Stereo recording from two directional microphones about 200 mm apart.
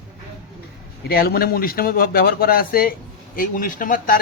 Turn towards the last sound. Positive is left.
turn(degrees=40)  # may be behind; listen again after turning